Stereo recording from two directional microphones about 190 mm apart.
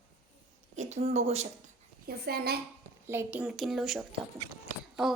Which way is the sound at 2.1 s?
55° right (ahead or behind).